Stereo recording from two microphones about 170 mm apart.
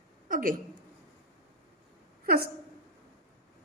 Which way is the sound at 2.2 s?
65° right (ahead or behind).